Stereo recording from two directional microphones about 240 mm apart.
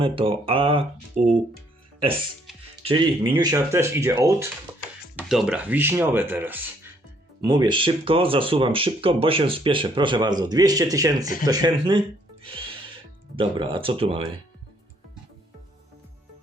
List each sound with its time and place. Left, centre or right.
0.0 s speech: right
2.8 s speech: right
4.7 s music: centre
5.1 s speech: centre
7.4 s speech: centre